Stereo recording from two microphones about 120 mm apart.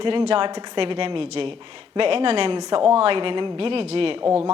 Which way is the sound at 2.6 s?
40° right (ahead or behind).